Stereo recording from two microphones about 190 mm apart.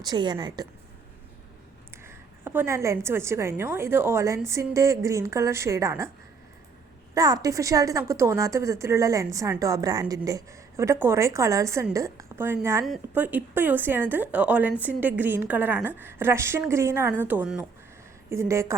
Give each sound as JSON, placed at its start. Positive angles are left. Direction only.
{"t": 0.0, "sound": "a woman's voice", "side_deg": -20}
{"t": 2.0, "sound": "a woman's voice", "side_deg": -10}
{"t": 7.1, "sound": "a woman's voice", "side_deg": -20}